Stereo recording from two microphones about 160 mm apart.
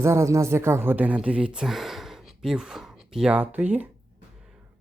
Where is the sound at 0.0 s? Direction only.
20° right (ahead or behind).